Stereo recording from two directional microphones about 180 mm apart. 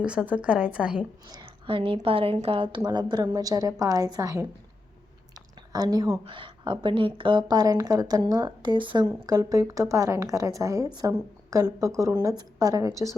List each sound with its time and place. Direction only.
0.0 s a woman's voice: 5° right (ahead or behind)
1.3 s a woman's voice: 25° right (ahead or behind)